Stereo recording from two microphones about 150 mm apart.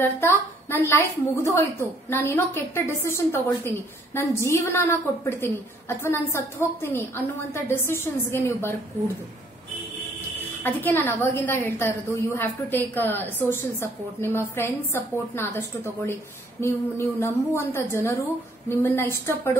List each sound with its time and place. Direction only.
0.0 s a woman's voice: 15° left (ahead or behind)
10.6 s a woman's voice: 15° left (ahead or behind)